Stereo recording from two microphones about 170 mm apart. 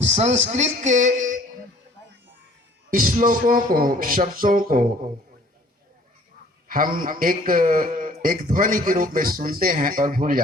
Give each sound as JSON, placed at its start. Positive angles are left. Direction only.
{"t": 0.0, "sound": "speech", "side_deg": -40}
{"t": 2.9, "sound": "speech", "side_deg": -50}
{"t": 6.7, "sound": "a man's voice", "side_deg": -55}